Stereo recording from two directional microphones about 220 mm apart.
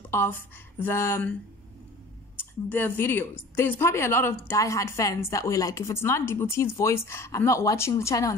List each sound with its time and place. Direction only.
0.1 s speech: 10° left (ahead or behind)
2.3 s speech: 10° left (ahead or behind)